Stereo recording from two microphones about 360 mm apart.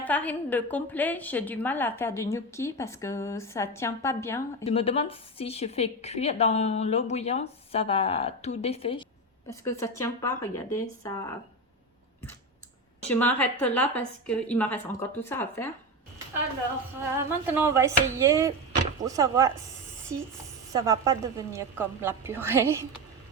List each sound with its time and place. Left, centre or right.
0.0 s a woman's voice: centre
13.1 s a woman's voice: centre
17.4 s a woman's voice: centre
20.7 s a woman's voice: centre